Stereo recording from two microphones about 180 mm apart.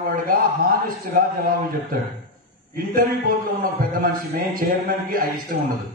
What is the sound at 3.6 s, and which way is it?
A man's voice, 55° right (ahead or behind).